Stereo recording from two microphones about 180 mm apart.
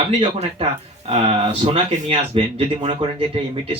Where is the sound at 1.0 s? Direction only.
35° right (ahead or behind).